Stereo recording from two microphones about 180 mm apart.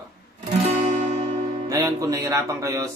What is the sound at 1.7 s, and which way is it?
Speech, 20° right (ahead or behind).